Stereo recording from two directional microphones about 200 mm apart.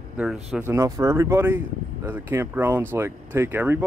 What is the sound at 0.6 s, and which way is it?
Speech, 15° right (ahead or behind).